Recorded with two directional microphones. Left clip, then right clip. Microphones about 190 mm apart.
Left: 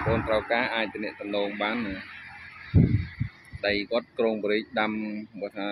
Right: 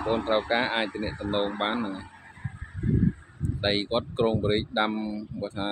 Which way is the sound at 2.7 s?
55° right (ahead or behind).